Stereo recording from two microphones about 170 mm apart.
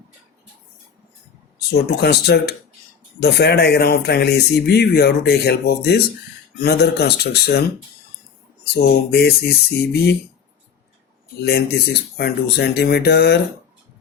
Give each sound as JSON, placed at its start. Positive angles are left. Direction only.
{"t": 1.5, "sound": "speech", "side_deg": 70}
{"t": 8.6, "sound": "speech", "side_deg": 75}
{"t": 11.4, "sound": "speech", "side_deg": 75}